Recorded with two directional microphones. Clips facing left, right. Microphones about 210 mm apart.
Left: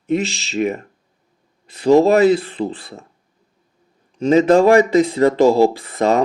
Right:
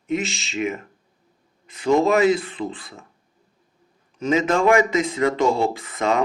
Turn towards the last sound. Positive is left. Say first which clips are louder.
# left 5 dB
turn(degrees=35)  # may be behind; listen again after turning